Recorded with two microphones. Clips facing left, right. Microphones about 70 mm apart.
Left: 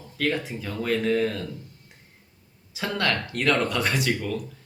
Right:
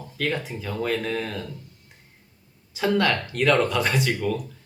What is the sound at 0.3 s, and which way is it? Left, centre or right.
Speech, centre.